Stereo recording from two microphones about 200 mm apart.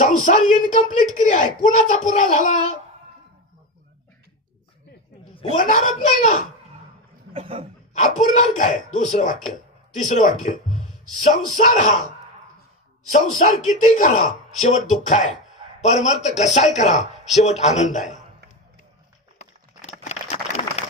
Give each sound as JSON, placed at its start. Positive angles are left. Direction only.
{"t": 0.0, "sound": "speech", "side_deg": 40}
{"t": 5.6, "sound": "speech", "side_deg": 40}
{"t": 7.3, "sound": "speech", "side_deg": -30}
{"t": 7.9, "sound": "speech", "side_deg": 35}
{"t": 11.5, "sound": "speech", "side_deg": 40}
{"t": 13.4, "sound": "speech", "side_deg": 40}
{"t": 19.8, "sound": "a sound", "side_deg": 35}